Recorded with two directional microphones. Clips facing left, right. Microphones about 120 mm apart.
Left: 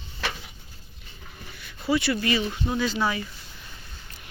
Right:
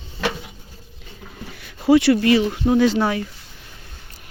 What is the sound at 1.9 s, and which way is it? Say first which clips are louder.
Speech: right 10 dB; 90° right.